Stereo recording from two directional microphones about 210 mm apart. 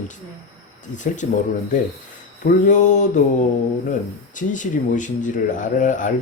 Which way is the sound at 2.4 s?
35° left (ahead or behind).